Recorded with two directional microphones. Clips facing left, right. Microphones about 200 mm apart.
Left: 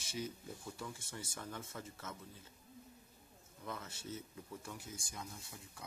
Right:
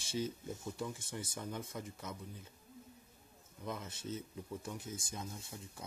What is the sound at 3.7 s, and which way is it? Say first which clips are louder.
Speech: right 4 dB; 20° right (ahead or behind).